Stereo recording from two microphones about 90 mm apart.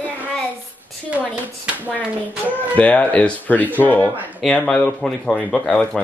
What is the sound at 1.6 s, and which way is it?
Speech, 20° right (ahead or behind).